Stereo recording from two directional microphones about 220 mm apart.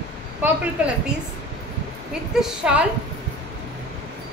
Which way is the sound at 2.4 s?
5° right (ahead or behind).